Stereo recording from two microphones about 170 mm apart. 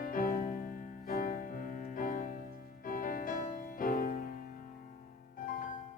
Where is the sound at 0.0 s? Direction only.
55° left (ahead or behind).